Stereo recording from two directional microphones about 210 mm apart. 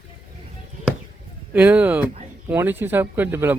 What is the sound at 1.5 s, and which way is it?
Speech, 5° right (ahead or behind).